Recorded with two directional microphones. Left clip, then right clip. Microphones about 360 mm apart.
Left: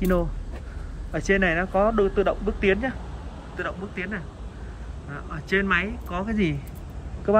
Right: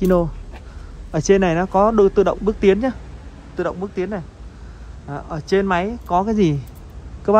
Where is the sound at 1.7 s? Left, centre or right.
Left.